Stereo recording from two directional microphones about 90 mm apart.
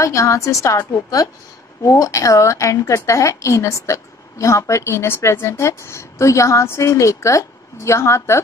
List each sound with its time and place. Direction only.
0.0 s a woman's voice: 35° left (ahead or behind)